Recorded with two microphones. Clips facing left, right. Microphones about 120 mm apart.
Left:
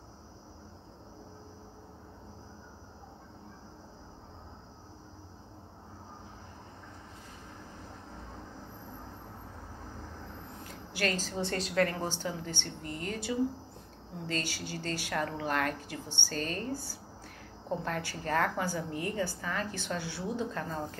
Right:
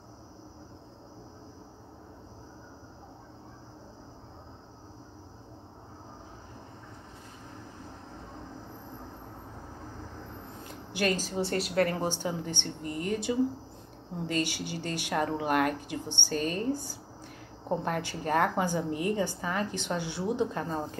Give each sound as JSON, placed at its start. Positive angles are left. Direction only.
{"t": 10.7, "sound": "a woman's voice", "side_deg": -20}